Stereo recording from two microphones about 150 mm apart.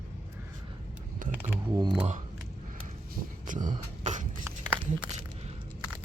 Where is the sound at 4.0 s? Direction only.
50° right (ahead or behind).